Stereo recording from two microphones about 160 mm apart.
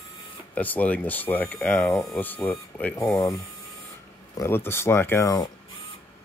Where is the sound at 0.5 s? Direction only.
10° left (ahead or behind).